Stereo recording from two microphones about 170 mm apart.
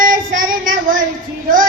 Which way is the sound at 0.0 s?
55° right (ahead or behind).